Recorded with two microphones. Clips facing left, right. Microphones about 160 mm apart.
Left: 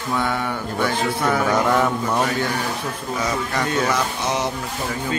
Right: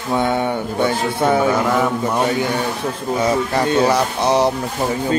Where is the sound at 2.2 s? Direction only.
25° right (ahead or behind).